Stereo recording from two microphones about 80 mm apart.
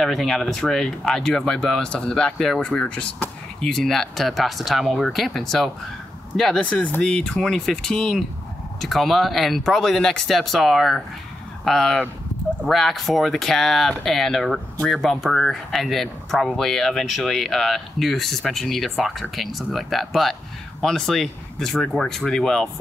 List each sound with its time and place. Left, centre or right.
0.0 s speech: centre